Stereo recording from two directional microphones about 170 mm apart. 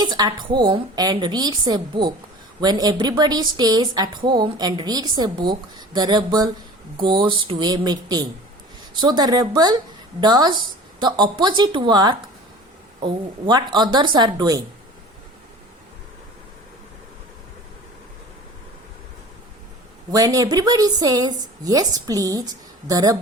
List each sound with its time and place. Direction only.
0.0 s a woman's voice: 25° right (ahead or behind)
20.1 s a woman's voice: 20° right (ahead or behind)